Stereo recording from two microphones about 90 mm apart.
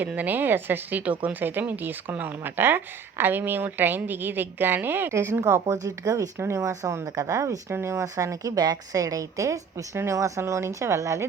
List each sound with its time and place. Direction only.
0.0 s speech: 20° right (ahead or behind); by 11.3 s 35° right (ahead or behind)